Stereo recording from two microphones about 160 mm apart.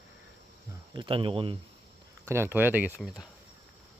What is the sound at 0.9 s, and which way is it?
Speech, 35° right (ahead or behind).